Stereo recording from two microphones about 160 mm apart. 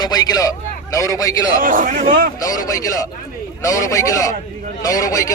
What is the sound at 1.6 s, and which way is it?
Speech, 55° right (ahead or behind).